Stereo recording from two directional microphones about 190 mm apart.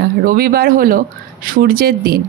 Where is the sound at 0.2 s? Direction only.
50° right (ahead or behind).